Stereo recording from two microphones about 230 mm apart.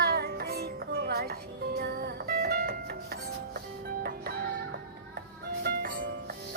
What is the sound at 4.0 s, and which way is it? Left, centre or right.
Music, right.